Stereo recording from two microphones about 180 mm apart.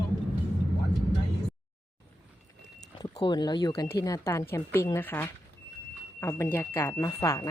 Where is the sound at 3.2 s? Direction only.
25° left (ahead or behind).